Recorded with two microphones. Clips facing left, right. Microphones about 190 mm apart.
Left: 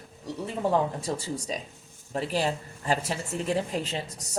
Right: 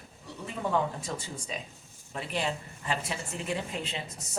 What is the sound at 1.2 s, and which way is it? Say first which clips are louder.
Speech: left 6 dB; 40° left (ahead or behind).